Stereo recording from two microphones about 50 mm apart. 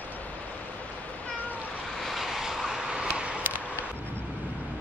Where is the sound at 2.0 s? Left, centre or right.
Centre; by 3.4 s right.